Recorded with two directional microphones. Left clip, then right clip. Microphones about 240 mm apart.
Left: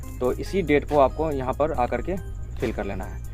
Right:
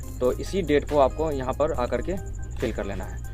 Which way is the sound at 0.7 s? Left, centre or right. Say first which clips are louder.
Left 1 dB; left.